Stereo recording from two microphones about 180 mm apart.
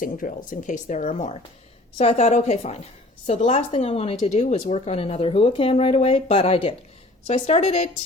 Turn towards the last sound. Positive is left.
turn(degrees=35)  # may be behind; listen again after turning